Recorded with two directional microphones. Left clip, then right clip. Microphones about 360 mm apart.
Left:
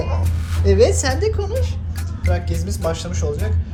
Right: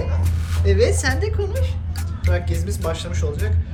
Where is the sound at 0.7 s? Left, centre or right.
Centre.